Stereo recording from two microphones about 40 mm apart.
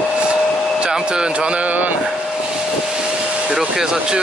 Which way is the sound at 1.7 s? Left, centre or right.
Right.